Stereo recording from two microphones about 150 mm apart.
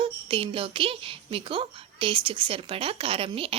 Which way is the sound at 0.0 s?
35° right (ahead or behind).